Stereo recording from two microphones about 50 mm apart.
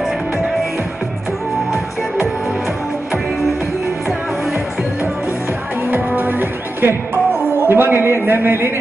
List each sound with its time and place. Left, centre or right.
5.9 s music: right